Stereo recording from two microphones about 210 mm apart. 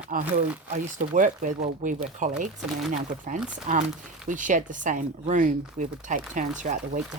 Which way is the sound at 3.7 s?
35° right (ahead or behind).